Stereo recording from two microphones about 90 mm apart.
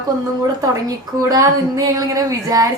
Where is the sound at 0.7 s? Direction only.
40° right (ahead or behind).